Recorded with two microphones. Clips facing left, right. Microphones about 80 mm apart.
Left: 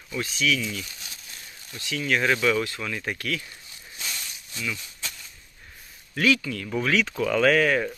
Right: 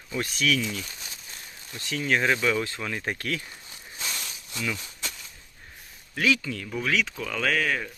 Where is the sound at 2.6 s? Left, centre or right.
Right.